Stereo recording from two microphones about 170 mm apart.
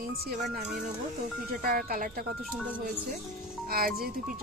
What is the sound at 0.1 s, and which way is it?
Speech, 65° right (ahead or behind).